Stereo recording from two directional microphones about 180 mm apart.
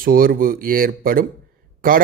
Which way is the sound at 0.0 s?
55° right (ahead or behind).